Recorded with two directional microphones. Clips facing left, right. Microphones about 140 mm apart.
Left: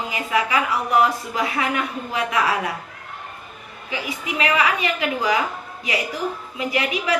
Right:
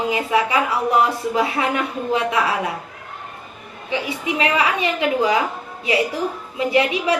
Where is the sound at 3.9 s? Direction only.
30° right (ahead or behind).